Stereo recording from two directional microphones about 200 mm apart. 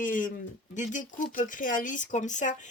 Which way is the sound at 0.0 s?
40° left (ahead or behind).